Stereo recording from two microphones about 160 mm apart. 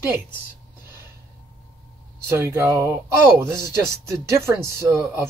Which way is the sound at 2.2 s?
15° right (ahead or behind).